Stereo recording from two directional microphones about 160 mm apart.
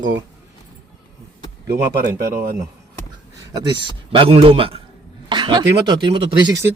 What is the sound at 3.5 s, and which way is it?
A man's voice, 25° right (ahead or behind).